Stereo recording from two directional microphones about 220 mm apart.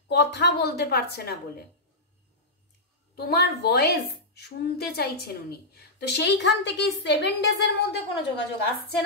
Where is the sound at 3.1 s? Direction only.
45° left (ahead or behind).